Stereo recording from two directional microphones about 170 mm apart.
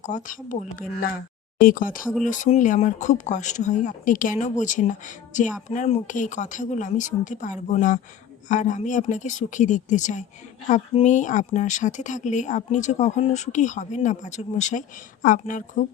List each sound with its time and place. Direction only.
0.0 s speech: 45° left (ahead or behind)